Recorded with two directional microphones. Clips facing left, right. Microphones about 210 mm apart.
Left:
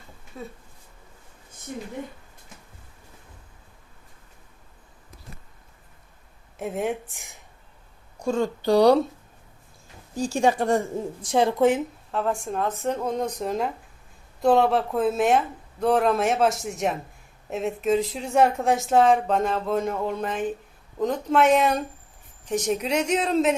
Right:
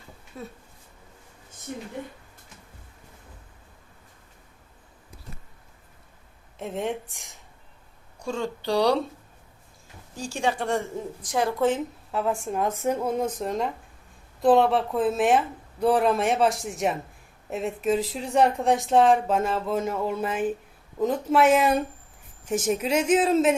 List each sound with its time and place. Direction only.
0.4 s a woman's voice: centre (ahead or behind)
6.6 s a woman's voice: 5° left (ahead or behind)
8.2 s speech: 45° left (ahead or behind)
10.2 s a woman's voice: 40° left (ahead or behind)
11.2 s a woman's voice: 25° left (ahead or behind)
12.1 s a woman's voice: 5° right (ahead or behind)